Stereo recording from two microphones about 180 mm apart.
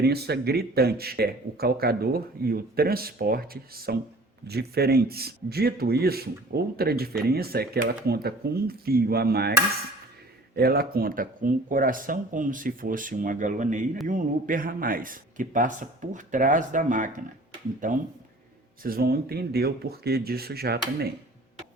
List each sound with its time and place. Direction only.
0.0 s speech: 65° right (ahead or behind); by 17.2 s 45° right (ahead or behind)
18.8 s speech: 55° right (ahead or behind)